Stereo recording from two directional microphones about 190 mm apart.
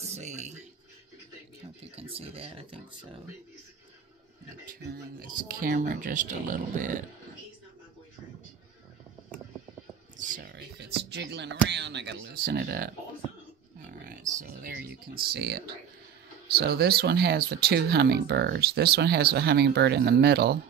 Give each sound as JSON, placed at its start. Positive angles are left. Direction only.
{"t": 0.0, "sound": "music", "side_deg": -35}
{"t": 1.9, "sound": "speech", "side_deg": -30}
{"t": 4.9, "sound": "speech", "side_deg": -50}
{"t": 10.1, "sound": "a sound", "side_deg": -45}
{"t": 10.5, "sound": "speech", "side_deg": -60}
{"t": 14.0, "sound": "a sound", "side_deg": -45}
{"t": 15.3, "sound": "speech", "side_deg": -60}